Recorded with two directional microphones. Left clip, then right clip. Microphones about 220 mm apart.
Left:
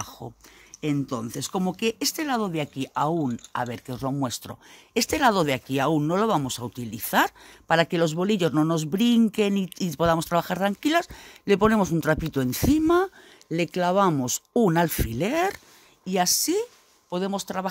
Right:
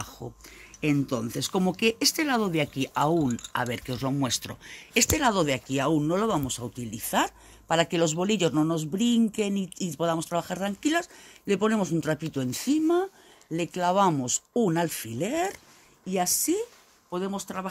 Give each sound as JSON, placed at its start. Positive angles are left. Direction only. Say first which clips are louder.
{"t": 0.2, "sound": "speech", "louder": "left 1 dB", "side_deg": 25}
{"t": 0.7, "sound": "speech", "louder": "right 1 dB", "side_deg": 15}